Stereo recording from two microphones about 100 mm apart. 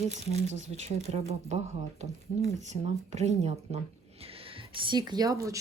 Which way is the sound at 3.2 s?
90° right.